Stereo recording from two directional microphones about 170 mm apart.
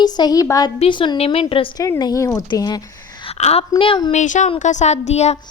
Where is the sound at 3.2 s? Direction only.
35° left (ahead or behind).